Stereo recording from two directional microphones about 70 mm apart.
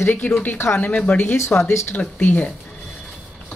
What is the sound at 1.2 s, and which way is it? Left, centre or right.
Speech, left.